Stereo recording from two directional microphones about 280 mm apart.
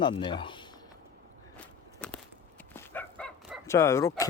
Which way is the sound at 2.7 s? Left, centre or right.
Centre.